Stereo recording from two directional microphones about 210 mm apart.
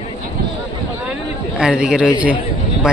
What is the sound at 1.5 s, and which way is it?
Speech, 5° right (ahead or behind).